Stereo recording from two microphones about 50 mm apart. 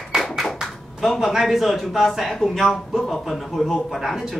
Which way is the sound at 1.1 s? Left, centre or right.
Centre.